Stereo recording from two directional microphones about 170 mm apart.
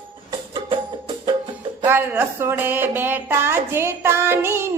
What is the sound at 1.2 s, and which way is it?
Music, 30° right (ahead or behind).